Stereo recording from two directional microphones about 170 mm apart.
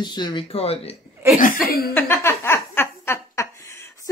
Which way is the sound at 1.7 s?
65° left (ahead or behind).